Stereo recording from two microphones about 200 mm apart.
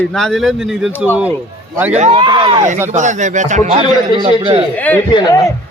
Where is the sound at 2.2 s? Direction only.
25° right (ahead or behind).